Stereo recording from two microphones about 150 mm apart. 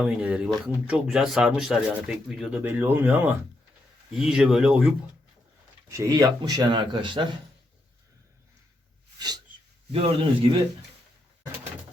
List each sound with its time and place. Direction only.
0.0 s speech: 10° right (ahead or behind)
5.9 s speech: 20° right (ahead or behind)
9.1 s a sound: 25° right (ahead or behind)
9.9 s a man's voice: 40° right (ahead or behind)